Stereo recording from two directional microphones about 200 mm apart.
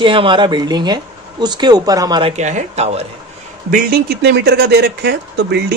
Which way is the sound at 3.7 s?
45° right (ahead or behind).